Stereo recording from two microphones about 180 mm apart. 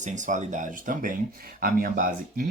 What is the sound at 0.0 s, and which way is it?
Speech, 45° right (ahead or behind).